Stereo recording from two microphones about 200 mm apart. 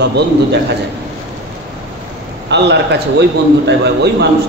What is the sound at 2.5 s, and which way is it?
A man's voice, 60° right (ahead or behind).